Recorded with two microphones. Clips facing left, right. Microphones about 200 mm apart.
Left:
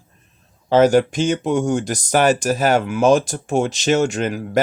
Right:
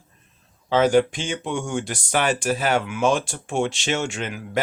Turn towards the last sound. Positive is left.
turn(degrees=40)  # may be behind; listen again after turning